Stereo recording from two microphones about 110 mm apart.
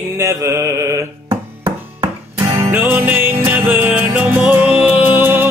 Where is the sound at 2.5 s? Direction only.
25° right (ahead or behind).